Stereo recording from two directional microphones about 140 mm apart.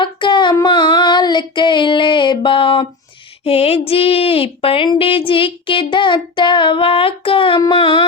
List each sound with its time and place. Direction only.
0.0 s female singing: 35° left (ahead or behind)
0.6 s child singing: 35° left (ahead or behind)
3.4 s a sound: 45° left (ahead or behind)